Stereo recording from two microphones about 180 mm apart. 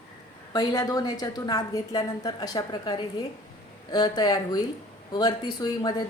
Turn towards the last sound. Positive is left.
turn(degrees=20)  # may be behind; listen again after turning